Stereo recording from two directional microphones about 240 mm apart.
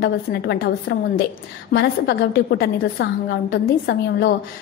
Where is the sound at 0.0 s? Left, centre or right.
Left.